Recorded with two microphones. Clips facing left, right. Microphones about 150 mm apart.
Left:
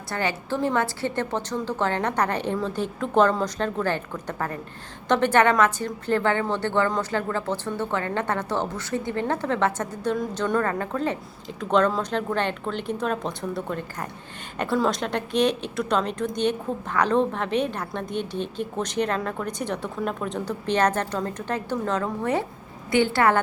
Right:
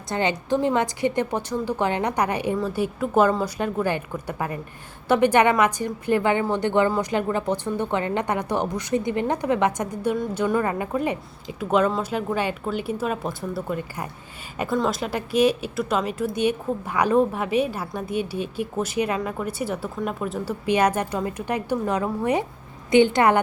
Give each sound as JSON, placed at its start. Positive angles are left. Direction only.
{"t": 0.1, "sound": "a woman's voice", "side_deg": -20}